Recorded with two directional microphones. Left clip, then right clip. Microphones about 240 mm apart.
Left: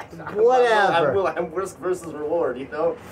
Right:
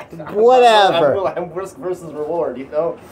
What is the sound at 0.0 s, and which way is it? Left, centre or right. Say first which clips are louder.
Speech: right 5 dB; right.